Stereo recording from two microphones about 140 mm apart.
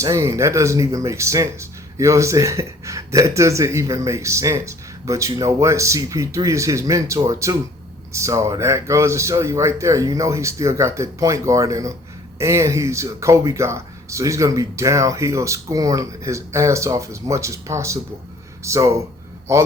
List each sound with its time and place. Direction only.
0.0 s speech: 20° right (ahead or behind)